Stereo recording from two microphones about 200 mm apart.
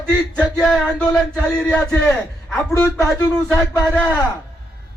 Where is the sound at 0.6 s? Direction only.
Centre (ahead or behind).